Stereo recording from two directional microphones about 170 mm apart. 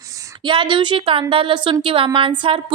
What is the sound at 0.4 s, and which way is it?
A woman's voice, 30° right (ahead or behind).